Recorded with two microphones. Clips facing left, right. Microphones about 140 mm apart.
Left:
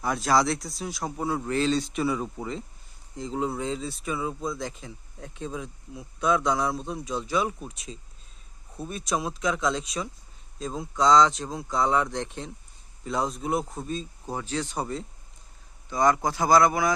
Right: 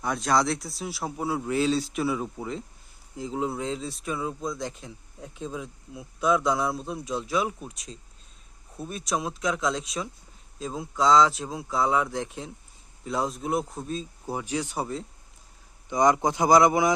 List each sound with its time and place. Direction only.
0.0 s speech: centre (ahead or behind)
15.9 s speech: 20° right (ahead or behind)